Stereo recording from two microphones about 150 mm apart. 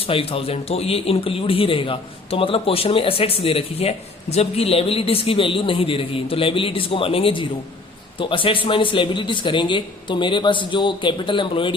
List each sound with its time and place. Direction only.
0.0 s a man's voice: 40° left (ahead or behind)